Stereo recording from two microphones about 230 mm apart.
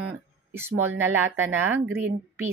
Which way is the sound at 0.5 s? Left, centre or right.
Centre.